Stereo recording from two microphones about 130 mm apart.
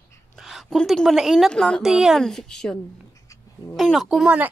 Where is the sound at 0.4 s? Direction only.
5° right (ahead or behind).